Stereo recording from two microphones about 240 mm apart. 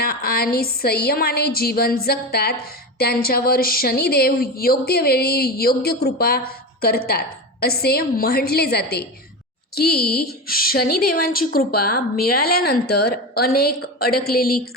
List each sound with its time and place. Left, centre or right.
0.0 s a woman's voice: left